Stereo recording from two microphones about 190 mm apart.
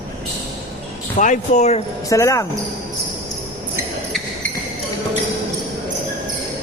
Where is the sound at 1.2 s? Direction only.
40° left (ahead or behind).